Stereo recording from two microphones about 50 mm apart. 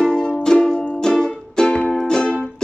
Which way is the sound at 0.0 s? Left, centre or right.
Centre.